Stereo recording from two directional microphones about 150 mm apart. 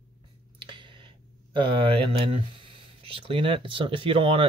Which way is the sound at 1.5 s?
35° right (ahead or behind).